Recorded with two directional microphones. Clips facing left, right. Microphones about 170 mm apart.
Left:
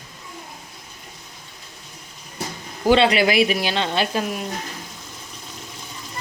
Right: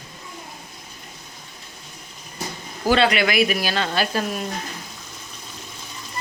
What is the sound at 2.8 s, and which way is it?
Speech, 25° left (ahead or behind).